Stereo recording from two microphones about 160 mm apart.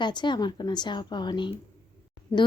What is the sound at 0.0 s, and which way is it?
A woman's voice, 30° left (ahead or behind).